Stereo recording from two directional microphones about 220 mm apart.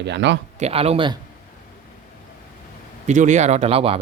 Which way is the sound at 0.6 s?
25° right (ahead or behind).